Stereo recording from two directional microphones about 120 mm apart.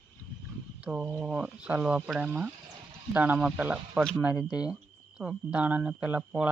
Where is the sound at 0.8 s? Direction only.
10° right (ahead or behind).